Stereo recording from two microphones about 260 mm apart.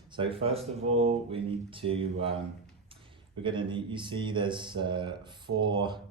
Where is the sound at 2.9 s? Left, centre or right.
Centre.